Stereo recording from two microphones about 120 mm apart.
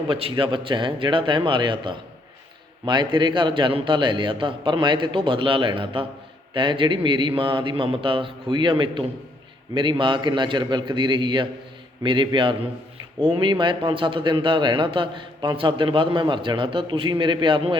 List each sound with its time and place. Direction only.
0.1 s a man's voice: 50° right (ahead or behind)